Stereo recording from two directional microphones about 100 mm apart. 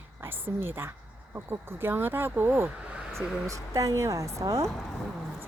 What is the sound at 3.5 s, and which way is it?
Speech, 35° right (ahead or behind).